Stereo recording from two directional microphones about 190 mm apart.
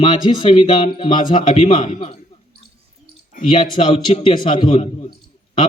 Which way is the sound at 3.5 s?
25° left (ahead or behind).